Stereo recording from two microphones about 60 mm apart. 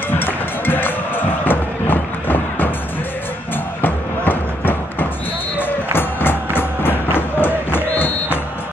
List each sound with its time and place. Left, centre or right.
0.1 s music: left
3.8 s a sound: left
5.6 s music: left